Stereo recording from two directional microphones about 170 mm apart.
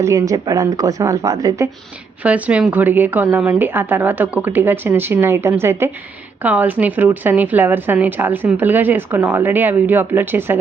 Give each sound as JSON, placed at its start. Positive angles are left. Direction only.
{"t": 0.0, "sound": "a woman's voice", "side_deg": -20}
{"t": 2.2, "sound": "a woman's voice", "side_deg": -10}